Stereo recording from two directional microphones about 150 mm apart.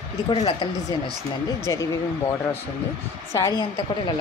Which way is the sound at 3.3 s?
20° left (ahead or behind).